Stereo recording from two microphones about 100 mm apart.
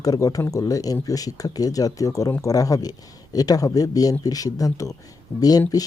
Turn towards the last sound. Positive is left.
turn(degrees=35)  # may be behind; listen again after turning